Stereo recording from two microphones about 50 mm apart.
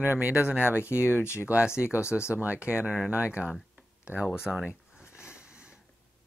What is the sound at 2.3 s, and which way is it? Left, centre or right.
Speech, right.